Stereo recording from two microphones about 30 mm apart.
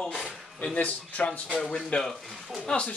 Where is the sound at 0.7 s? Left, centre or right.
Left.